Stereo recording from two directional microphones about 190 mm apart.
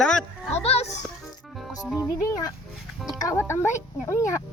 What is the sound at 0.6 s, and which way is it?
Speech, 35° left (ahead or behind).